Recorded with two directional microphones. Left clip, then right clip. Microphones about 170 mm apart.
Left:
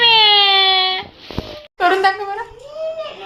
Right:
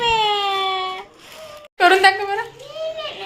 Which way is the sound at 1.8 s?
10° right (ahead or behind).